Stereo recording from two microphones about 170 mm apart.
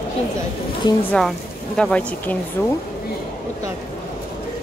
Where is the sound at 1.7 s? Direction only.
5° left (ahead or behind).